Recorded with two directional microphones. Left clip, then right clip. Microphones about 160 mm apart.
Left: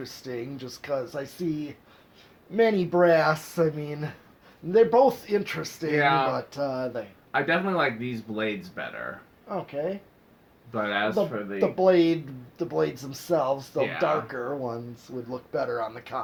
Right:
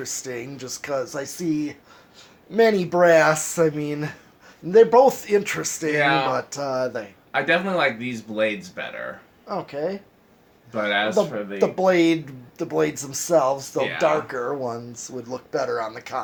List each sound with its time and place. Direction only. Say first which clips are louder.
0.0 s speech: right 4 dB; 45° right (ahead or behind)
6.0 s speech: right 2 dB; 30° left (ahead or behind)
6.3 s speech: right 4 dB; 45° right (ahead or behind)
7.3 s speech: right 4 dB; 30° left (ahead or behind)
9.5 s speech: right 3 dB; 35° right (ahead or behind)
10.7 s speech: right 5 dB; 30° left (ahead or behind)
11.5 s speech: right 2 dB; 45° right (ahead or behind)